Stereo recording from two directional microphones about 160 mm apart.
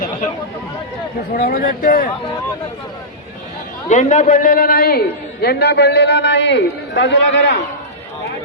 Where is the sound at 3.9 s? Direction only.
50° left (ahead or behind); by 5.0 s 70° left (ahead or behind).